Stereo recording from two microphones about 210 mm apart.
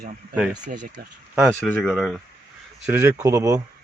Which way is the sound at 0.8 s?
55° right (ahead or behind).